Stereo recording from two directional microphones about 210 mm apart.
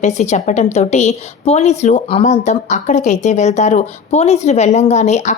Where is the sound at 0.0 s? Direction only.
35° left (ahead or behind).